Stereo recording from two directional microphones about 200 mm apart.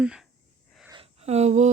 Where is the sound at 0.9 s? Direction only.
30° right (ahead or behind).